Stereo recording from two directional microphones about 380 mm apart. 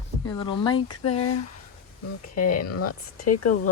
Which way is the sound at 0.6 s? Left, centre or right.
Centre.